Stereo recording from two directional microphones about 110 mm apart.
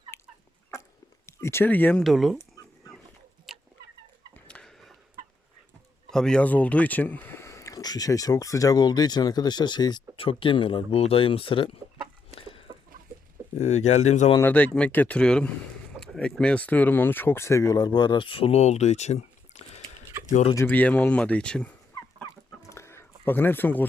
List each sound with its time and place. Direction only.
0.1 s chicken: 25° left (ahead or behind)
1.3 s speech: 25° left (ahead or behind)
2.0 s speech: centre (ahead or behind)
3.5 s fowl: 5° right (ahead or behind)
4.4 s a sound: 5° left (ahead or behind)
6.1 s speech: 5° left (ahead or behind); by 10.0 s 40° left (ahead or behind)
10.2 s speech: 55° left (ahead or behind)
12.3 s chicken: 55° left (ahead or behind)
13.6 s speech: 90° left
14.4 s speech: 15° left (ahead or behind); by 20.1 s 75° left (ahead or behind)
20.7 s speech: 15° left (ahead or behind)
22.7 s a sound: 25° left (ahead or behind)